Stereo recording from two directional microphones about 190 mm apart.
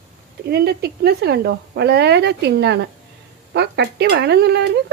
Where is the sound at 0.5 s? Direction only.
55° right (ahead or behind).